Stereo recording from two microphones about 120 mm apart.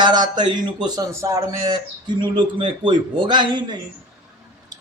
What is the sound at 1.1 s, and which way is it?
Speech, 25° right (ahead or behind).